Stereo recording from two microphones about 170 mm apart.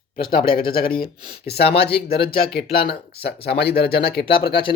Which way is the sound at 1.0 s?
70° left (ahead or behind).